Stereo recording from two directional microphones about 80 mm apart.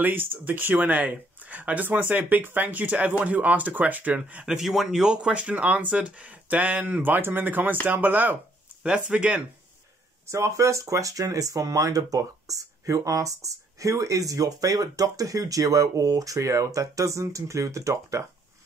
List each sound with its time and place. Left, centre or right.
0.0 s speech: right
4.6 s speech: centre
10.2 s speech: right